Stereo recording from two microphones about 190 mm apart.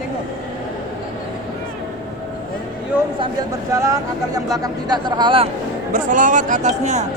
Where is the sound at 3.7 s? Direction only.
15° right (ahead or behind).